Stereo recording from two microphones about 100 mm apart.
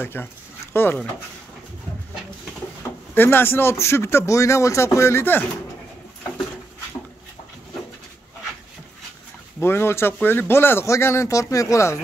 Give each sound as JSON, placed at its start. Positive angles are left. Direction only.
{"t": 0.0, "sound": "speech", "side_deg": 20}
{"t": 3.2, "sound": "speech", "side_deg": 20}
{"t": 9.6, "sound": "speech", "side_deg": 25}